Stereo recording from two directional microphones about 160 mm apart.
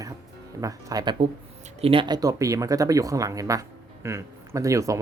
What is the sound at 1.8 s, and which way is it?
Speech, 35° right (ahead or behind).